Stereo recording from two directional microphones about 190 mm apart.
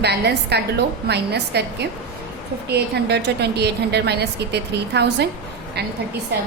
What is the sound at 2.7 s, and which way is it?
A woman's voice, 60° right (ahead or behind).